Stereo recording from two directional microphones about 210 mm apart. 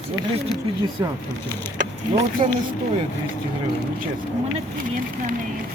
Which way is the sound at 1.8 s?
30° right (ahead or behind).